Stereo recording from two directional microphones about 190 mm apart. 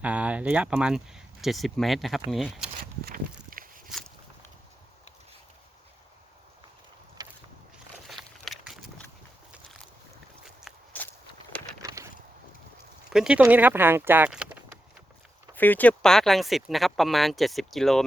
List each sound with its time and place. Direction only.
0.0 s speech: 5° right (ahead or behind)
7.2 s vehicle: 20° right (ahead or behind)
8.0 s a sound: centre (ahead or behind)
10.4 s walk: centre (ahead or behind)
11.8 s a sound: 15° right (ahead or behind)
13.1 s speech: 5° right (ahead or behind)
15.5 s speech: 10° left (ahead or behind)